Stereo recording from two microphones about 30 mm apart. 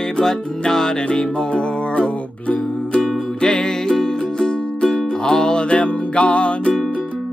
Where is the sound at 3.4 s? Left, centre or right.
Left.